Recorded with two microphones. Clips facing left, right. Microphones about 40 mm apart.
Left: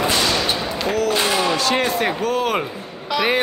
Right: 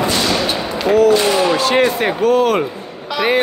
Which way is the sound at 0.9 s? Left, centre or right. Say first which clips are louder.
Right 9 dB; centre.